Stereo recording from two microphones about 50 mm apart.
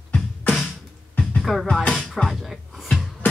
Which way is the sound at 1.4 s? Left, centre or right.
Centre.